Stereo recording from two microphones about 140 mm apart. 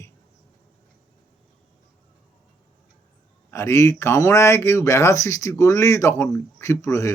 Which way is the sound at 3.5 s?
20° left (ahead or behind).